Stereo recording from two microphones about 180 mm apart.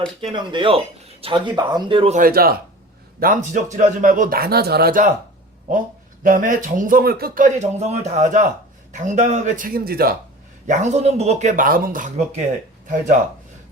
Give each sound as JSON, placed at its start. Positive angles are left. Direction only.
{"t": 0.2, "sound": "speech", "side_deg": -30}
{"t": 2.1, "sound": "speech", "side_deg": -55}
{"t": 6.2, "sound": "speech", "side_deg": -50}
{"t": 10.7, "sound": "speech", "side_deg": -40}